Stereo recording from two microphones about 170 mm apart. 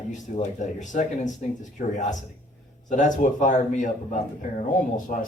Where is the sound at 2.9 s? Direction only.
45° left (ahead or behind).